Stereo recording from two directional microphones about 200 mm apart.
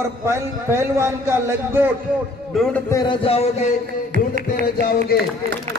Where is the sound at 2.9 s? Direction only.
25° left (ahead or behind).